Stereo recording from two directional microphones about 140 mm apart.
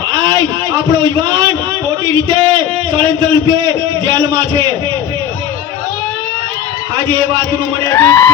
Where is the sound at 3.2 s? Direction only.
35° right (ahead or behind).